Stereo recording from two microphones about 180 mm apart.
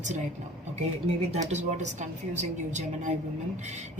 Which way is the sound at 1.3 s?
40° right (ahead or behind).